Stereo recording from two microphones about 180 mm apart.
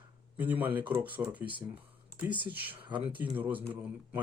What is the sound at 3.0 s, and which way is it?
Speech, 10° right (ahead or behind).